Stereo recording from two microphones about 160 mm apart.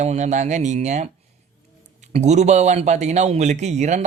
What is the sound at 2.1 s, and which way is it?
Speech, 45° right (ahead or behind).